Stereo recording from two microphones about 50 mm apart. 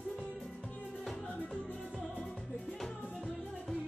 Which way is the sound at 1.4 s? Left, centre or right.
Centre.